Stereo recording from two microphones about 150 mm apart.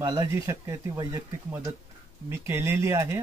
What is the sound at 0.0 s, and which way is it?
Speech, 25° right (ahead or behind).